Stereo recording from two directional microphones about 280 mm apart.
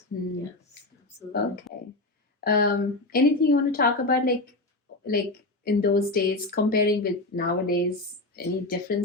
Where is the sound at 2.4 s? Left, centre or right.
Left.